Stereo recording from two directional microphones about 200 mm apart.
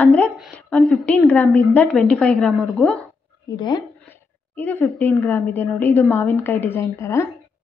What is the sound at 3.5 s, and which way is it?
Speech, 20° left (ahead or behind).